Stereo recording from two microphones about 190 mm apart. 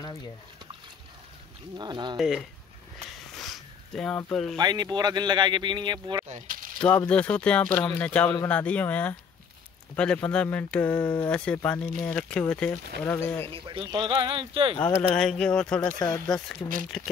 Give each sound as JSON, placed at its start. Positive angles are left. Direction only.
{"t": 0.0, "sound": "liquid", "side_deg": 20}
{"t": 1.8, "sound": "speech", "side_deg": -25}
{"t": 2.1, "sound": "speech", "side_deg": 0}
{"t": 3.3, "sound": "sniff", "side_deg": 0}
{"t": 4.3, "sound": "speech", "side_deg": 0}
{"t": 4.6, "sound": "speech", "side_deg": -20}
{"t": 6.2, "sound": "speech", "side_deg": -40}
{"t": 7.1, "sound": "speech", "side_deg": 5}
{"t": 13.5, "sound": "speech", "side_deg": -30}
{"t": 14.8, "sound": "speech", "side_deg": 10}